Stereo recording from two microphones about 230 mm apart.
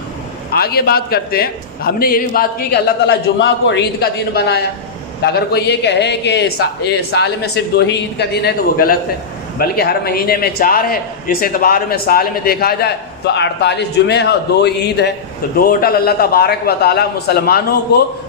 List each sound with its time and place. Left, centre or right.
0.5 s a man's voice: left